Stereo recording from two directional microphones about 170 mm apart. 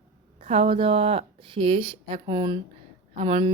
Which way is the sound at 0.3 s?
35° right (ahead or behind).